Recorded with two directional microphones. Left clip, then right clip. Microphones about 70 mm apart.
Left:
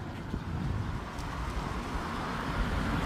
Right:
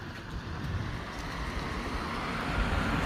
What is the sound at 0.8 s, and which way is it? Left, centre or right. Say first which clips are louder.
Vehicle: right 1 dB; centre.